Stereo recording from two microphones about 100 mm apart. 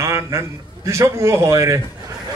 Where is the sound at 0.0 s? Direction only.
30° right (ahead or behind).